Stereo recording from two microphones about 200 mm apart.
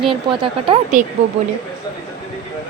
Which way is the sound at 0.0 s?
25° right (ahead or behind).